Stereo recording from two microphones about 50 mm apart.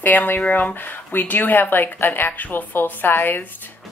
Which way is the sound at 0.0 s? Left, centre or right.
Left.